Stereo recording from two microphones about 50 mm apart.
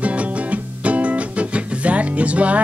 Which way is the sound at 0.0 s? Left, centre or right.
Right.